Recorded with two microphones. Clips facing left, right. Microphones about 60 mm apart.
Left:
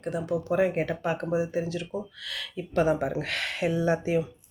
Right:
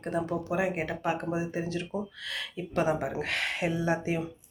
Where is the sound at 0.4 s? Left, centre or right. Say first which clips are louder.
Left 5 dB; centre.